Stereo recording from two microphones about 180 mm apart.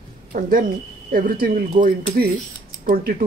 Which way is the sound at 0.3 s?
50° right (ahead or behind).